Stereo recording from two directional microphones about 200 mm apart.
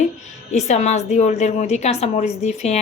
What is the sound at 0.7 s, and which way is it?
A woman's voice, 35° left (ahead or behind).